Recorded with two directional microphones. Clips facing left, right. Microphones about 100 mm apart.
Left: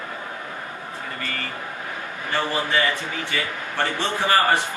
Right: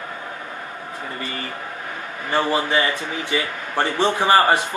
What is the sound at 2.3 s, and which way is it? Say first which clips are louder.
A man's voice: right 4 dB; 20° right (ahead or behind).